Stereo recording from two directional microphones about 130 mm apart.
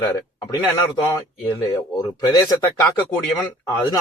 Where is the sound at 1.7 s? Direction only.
30° left (ahead or behind).